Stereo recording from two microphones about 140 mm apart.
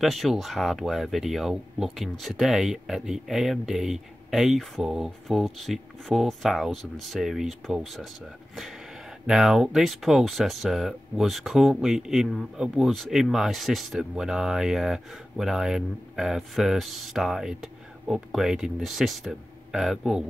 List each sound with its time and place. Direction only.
0.0 s speech: centre (ahead or behind)